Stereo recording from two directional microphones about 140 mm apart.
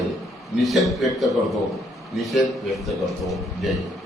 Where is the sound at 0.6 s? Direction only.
Centre (ahead or behind).